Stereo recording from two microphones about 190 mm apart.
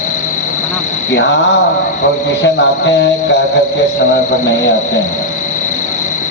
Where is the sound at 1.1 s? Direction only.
70° left (ahead or behind).